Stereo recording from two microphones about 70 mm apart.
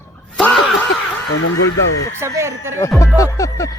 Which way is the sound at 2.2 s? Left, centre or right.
Right.